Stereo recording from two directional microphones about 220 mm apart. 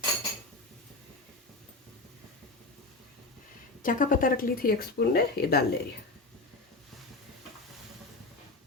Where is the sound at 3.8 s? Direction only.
40° left (ahead or behind).